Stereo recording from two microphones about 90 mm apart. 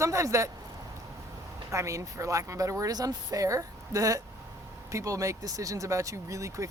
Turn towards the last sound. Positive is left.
turn(degrees=-35)  # may be behind; listen again after turning